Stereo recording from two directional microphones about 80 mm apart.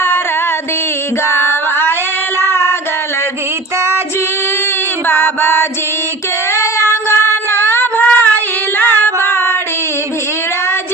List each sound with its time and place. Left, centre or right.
1.3 s female singing: left
2.4 s child singing: left
5.0 s mantra: left
6.5 s child singing: left